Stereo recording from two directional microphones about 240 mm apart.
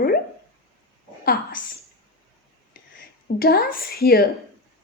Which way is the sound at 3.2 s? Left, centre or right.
Left.